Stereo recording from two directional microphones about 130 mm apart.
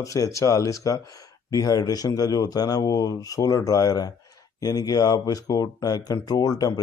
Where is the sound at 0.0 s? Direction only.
25° left (ahead or behind).